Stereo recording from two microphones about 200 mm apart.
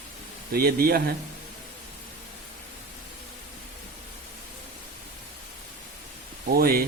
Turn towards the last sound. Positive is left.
turn(degrees=-50)  # may be behind; listen again after turning